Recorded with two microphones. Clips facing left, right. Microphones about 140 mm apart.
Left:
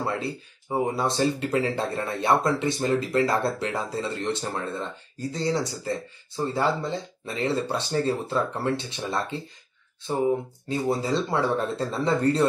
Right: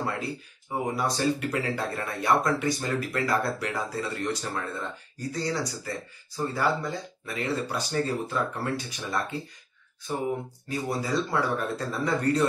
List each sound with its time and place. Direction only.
0.0 s speech: 25° left (ahead or behind)